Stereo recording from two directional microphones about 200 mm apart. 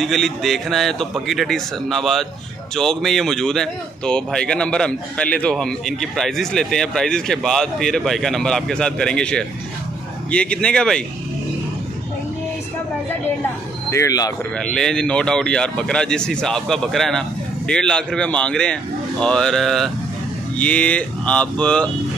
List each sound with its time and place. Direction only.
0.0 s speech: centre (ahead or behind)
13.8 s speech: 15° left (ahead or behind)
14.6 s speech: 5° left (ahead or behind)